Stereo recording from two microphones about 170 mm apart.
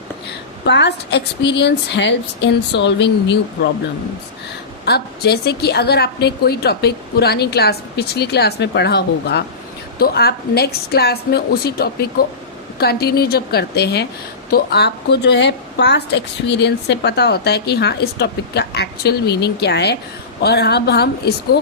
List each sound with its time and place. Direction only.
0.6 s speech: 90° left
4.9 s a woman's voice: 70° left (ahead or behind)
10.0 s a woman's voice: 70° left (ahead or behind)